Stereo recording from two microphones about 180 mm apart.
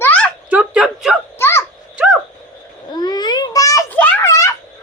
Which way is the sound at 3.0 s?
25° left (ahead or behind).